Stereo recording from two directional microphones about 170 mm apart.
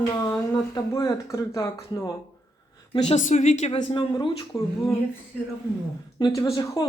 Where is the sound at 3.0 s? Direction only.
40° left (ahead or behind).